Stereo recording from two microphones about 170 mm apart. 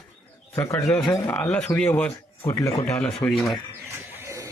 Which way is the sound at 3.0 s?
5° left (ahead or behind).